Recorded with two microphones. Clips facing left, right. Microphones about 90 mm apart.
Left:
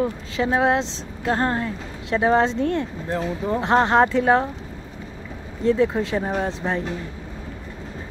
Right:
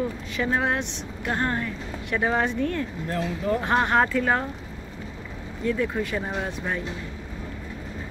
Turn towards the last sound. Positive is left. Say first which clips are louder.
# left 5 dB
turn(degrees=30)  # may be behind; listen again after turning